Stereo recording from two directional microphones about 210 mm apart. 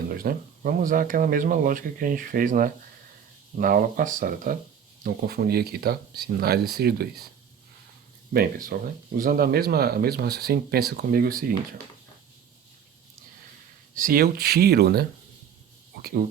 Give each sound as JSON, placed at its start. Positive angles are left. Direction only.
{"t": 0.1, "sound": "speech", "side_deg": -45}
{"t": 8.3, "sound": "speech", "side_deg": -45}
{"t": 13.9, "sound": "speech", "side_deg": -40}